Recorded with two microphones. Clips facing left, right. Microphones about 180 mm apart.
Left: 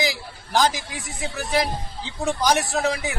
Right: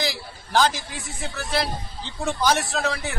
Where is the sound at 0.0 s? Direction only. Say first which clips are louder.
Left 2 dB; 10° left (ahead or behind).